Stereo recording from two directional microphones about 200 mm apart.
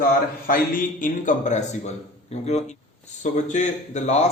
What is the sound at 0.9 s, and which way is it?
A man's voice, 40° left (ahead or behind).